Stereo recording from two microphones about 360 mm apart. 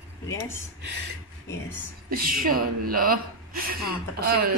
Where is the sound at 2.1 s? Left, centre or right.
Right.